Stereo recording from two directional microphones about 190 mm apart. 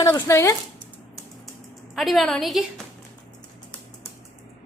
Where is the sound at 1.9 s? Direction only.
Centre (ahead or behind).